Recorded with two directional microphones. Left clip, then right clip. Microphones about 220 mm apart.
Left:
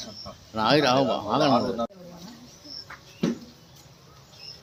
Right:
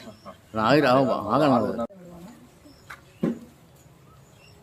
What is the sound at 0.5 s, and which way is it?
Speech, 40° right (ahead or behind).